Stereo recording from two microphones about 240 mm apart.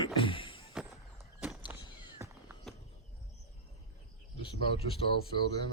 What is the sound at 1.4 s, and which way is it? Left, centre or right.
Walk, centre.